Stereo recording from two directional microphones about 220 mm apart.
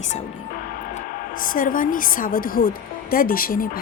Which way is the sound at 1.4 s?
40° left (ahead or behind).